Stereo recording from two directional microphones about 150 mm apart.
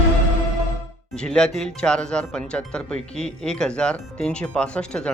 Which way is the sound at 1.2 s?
5° left (ahead or behind).